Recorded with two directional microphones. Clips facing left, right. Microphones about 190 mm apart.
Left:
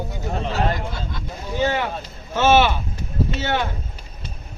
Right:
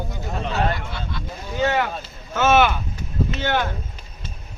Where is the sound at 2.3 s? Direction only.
30° left (ahead or behind).